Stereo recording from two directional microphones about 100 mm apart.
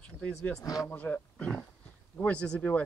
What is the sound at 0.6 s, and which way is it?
Speech, 35° left (ahead or behind).